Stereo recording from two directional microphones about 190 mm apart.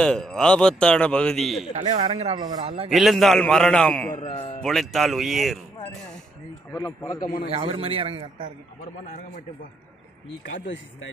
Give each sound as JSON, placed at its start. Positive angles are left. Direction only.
{"t": 0.0, "sound": "a man's voice", "side_deg": 5}
{"t": 2.0, "sound": "a man's voice", "side_deg": -35}
{"t": 2.9, "sound": "a man's voice", "side_deg": 0}
{"t": 4.2, "sound": "speech", "side_deg": 35}
{"t": 4.6, "sound": "a man's voice", "side_deg": 5}
{"t": 6.7, "sound": "a man's voice", "side_deg": 15}
{"t": 7.2, "sound": "a man's voice", "side_deg": 45}
{"t": 7.4, "sound": "a man's voice", "side_deg": -30}
{"t": 10.4, "sound": "speech", "side_deg": 70}